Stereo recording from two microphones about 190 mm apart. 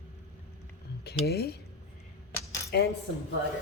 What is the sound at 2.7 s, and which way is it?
Speech, 60° left (ahead or behind).